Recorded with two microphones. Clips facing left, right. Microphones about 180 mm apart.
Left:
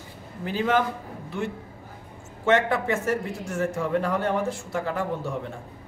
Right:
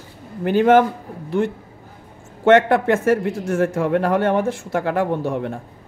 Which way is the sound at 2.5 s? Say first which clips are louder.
Right 8 dB; 65° right (ahead or behind).